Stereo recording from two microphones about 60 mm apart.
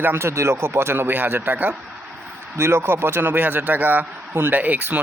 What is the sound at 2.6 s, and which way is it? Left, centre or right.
A man's voice, right.